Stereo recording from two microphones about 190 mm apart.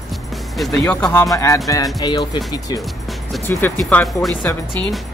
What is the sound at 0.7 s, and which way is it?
Speech, 15° left (ahead or behind).